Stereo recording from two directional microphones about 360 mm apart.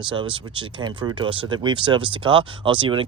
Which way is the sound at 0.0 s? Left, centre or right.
Centre.